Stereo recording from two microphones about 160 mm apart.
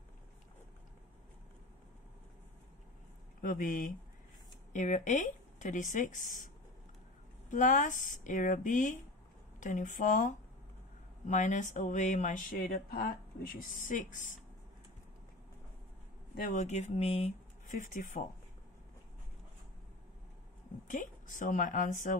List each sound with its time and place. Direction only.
3.3 s speech: 55° left (ahead or behind)
16.4 s speech: 45° left (ahead or behind)
17.7 s speech: 55° left (ahead or behind)
20.9 s speech: 55° left (ahead or behind)